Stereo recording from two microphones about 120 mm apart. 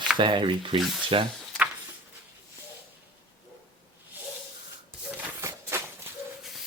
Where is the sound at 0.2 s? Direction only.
45° right (ahead or behind).